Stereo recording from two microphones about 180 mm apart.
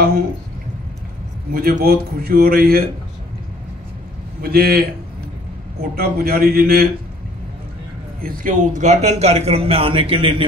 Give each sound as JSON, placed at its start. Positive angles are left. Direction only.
{"t": 1.5, "sound": "a man's voice", "side_deg": -55}
{"t": 4.4, "sound": "a man's voice", "side_deg": -55}
{"t": 5.9, "sound": "a man's voice", "side_deg": -55}
{"t": 8.2, "sound": "a man's voice", "side_deg": -50}